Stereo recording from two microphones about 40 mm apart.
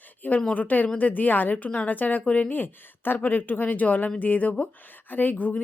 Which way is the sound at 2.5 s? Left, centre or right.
Left.